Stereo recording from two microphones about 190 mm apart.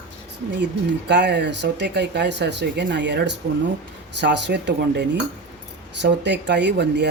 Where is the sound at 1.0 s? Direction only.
65° right (ahead or behind).